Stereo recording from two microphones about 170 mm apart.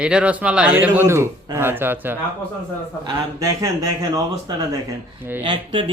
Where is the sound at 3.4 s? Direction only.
20° right (ahead or behind).